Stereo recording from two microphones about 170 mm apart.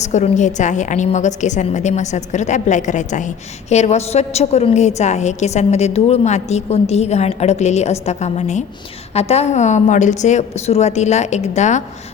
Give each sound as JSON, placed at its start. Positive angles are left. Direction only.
{"t": 0.0, "sound": "a woman's voice", "side_deg": 45}